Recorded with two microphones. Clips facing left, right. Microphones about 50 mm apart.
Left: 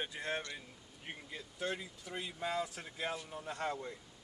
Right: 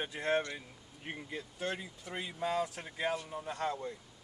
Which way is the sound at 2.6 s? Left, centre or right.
Right.